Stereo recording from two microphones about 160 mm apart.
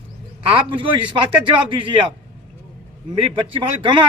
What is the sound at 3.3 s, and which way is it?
Speech, 30° right (ahead or behind).